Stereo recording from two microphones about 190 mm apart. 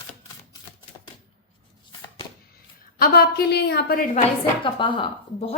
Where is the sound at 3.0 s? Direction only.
55° left (ahead or behind).